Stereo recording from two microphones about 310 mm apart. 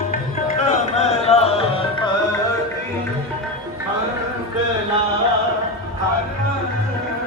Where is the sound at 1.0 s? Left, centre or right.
Left.